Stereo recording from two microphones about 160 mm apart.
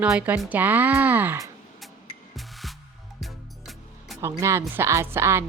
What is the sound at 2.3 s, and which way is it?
Music, centre (ahead or behind).